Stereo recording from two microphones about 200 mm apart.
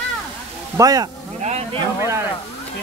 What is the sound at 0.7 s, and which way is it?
Speech, 20° right (ahead or behind).